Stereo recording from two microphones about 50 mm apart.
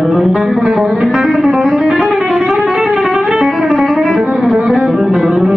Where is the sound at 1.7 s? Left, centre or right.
Centre.